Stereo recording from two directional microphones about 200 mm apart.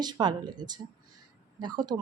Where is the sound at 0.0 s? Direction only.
20° right (ahead or behind).